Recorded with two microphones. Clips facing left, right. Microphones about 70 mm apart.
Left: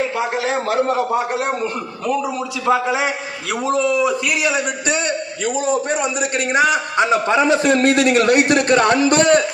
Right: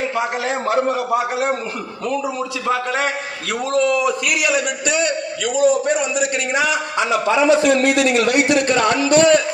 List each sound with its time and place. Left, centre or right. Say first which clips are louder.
1.3 s a man's voice: even; centre; by 9.4 s left